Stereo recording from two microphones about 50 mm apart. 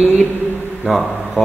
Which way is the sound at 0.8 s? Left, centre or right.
Centre.